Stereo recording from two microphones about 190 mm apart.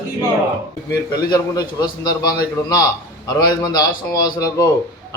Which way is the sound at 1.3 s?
20° left (ahead or behind).